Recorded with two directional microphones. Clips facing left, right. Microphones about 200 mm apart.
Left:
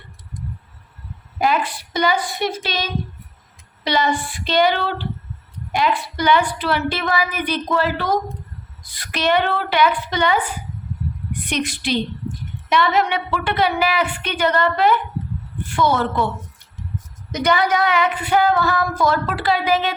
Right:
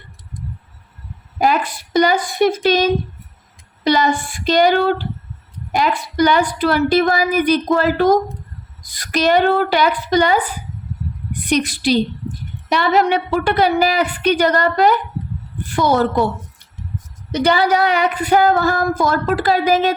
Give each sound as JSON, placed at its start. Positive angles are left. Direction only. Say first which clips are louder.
{"t": 1.4, "sound": "female singing", "louder": "right 3 dB", "side_deg": -45}
{"t": 5.7, "sound": "a woman's voice", "louder": "right 3 dB", "side_deg": -40}
{"t": 11.4, "sound": "a woman's voice", "louder": "right 7 dB", "side_deg": -35}
{"t": 17.3, "sound": "female singing", "louder": "right 3 dB", "side_deg": -30}